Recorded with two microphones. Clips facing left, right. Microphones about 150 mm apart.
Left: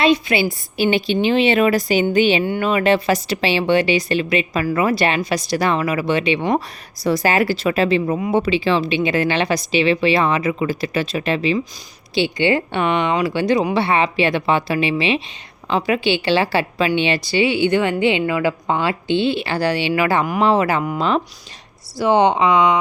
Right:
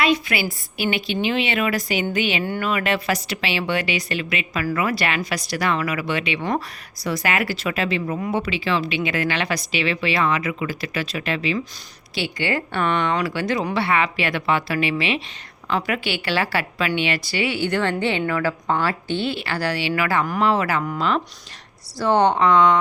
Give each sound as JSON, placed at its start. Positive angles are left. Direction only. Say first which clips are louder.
{"t": 0.0, "sound": "a woman's voice", "louder": "left 5 dB", "side_deg": 25}
{"t": 2.4, "sound": "a woman's voice", "louder": "left 6 dB", "side_deg": 20}